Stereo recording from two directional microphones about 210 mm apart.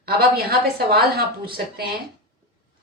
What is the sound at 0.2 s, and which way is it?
A woman's voice, 45° right (ahead or behind).